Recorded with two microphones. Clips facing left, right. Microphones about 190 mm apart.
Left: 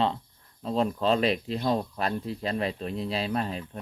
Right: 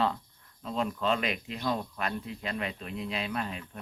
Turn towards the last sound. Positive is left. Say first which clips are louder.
# left 5 dB
turn(degrees=35)  # may be behind; listen again after turning